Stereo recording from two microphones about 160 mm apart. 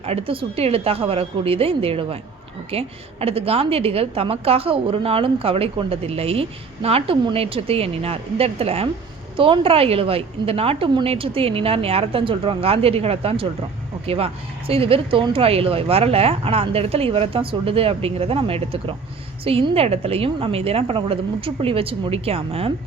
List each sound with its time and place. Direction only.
0.0 s a woman's voice: 35° right (ahead or behind)
14.7 s a woman's voice: 35° right (ahead or behind)